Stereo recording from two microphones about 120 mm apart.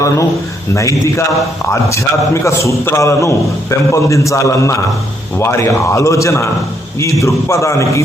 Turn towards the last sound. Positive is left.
turn(degrees=25)  # may be behind; listen again after turning